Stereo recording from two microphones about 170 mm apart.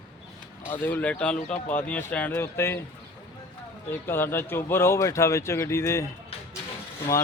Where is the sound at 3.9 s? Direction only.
15° left (ahead or behind).